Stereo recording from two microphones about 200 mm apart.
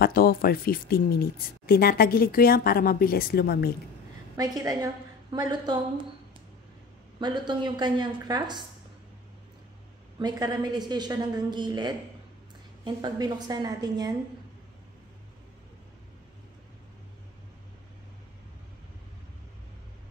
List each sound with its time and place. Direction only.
0.0 s speech: 50° left (ahead or behind)
4.4 s a woman's voice: 20° right (ahead or behind)
7.2 s a woman's voice: 20° right (ahead or behind)
10.1 s a woman's voice: 20° right (ahead or behind)